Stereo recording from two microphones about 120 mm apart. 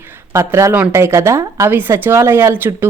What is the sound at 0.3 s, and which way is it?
A woman's voice, 25° right (ahead or behind).